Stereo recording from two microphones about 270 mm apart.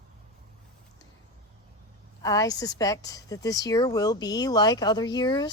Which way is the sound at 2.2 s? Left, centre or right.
Centre.